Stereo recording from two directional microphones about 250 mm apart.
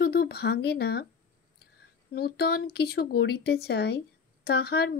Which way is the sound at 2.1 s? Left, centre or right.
Left.